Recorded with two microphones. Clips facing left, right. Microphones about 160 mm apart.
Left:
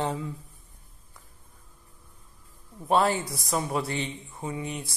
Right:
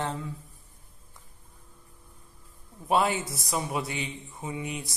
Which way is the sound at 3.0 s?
20° right (ahead or behind).